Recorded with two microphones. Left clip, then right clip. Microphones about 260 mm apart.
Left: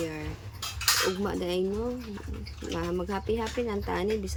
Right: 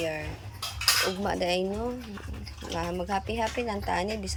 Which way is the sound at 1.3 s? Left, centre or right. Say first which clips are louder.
Right 3 dB; centre.